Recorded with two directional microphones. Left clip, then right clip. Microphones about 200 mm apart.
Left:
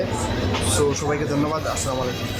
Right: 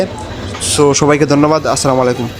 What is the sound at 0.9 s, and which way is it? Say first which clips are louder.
A man's voice: right 13 dB; 35° right (ahead or behind).